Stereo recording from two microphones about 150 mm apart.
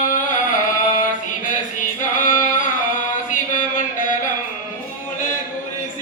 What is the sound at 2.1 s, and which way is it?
Music, 60° left (ahead or behind).